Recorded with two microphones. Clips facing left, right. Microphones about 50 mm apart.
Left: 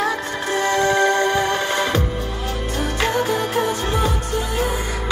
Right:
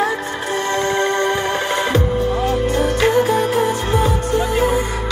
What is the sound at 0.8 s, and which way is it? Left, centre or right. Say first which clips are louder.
Music: left 2 dB; right.